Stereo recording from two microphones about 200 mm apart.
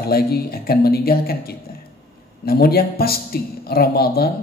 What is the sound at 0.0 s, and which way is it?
Speech, 50° left (ahead or behind).